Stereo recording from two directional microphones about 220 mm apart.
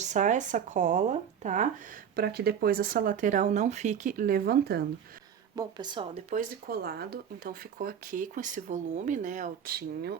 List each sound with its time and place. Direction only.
0.0 s speech: 35° right (ahead or behind)
2.1 s speech: 45° right (ahead or behind)
5.5 s a woman's voice: 20° right (ahead or behind)
6.3 s speech: 40° right (ahead or behind)